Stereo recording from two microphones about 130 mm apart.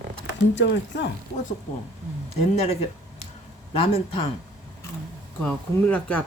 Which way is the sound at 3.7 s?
45° left (ahead or behind).